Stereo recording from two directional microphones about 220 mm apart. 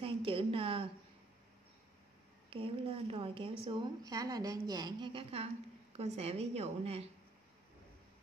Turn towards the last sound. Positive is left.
turn(degrees=-25)  # may be behind; listen again after turning